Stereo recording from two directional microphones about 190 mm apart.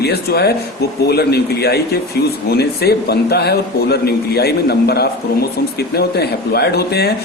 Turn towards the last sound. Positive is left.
turn(degrees=55)  # may be behind; listen again after turning